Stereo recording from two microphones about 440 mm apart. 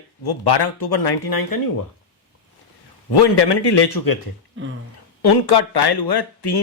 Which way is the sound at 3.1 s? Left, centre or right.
Left.